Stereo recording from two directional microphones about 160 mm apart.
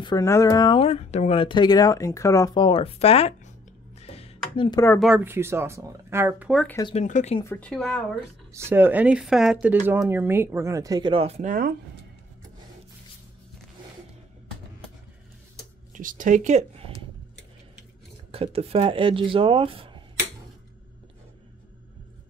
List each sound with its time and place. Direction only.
0.0 s speech: 25° left (ahead or behind); by 3.5 s 40° left (ahead or behind)
4.0 s a sound: 40° left (ahead or behind)
5.0 s speech: 10° right (ahead or behind)
7.0 s speech: 45° left (ahead or behind)
7.4 s speech: 10° left (ahead or behind)
8.5 s speech: 15° right (ahead or behind); by 11.6 s 45° right (ahead or behind)
15.9 s speech: 55° right (ahead or behind)
18.3 s speech: 35° right (ahead or behind)